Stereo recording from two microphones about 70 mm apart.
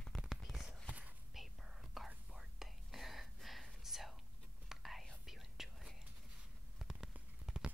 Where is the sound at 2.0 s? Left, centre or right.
Centre.